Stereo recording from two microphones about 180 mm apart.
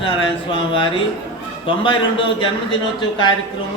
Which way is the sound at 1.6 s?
25° left (ahead or behind).